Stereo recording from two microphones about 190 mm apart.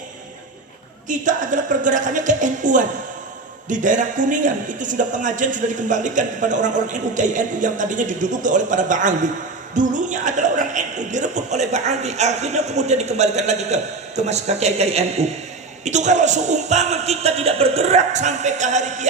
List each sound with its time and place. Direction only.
1.0 s a man's voice: 40° right (ahead or behind)